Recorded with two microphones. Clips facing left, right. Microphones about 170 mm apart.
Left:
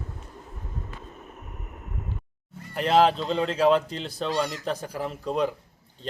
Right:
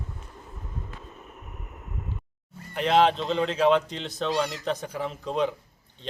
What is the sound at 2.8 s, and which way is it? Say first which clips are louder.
Speech: left 1 dB; 5° left (ahead or behind).